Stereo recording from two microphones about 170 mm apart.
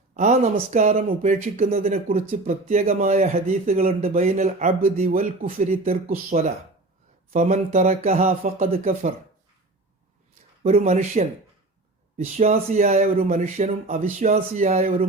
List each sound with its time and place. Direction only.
0.1 s speech: 45° right (ahead or behind)
6.1 s speech: 40° right (ahead or behind)
10.6 s speech: 40° right (ahead or behind)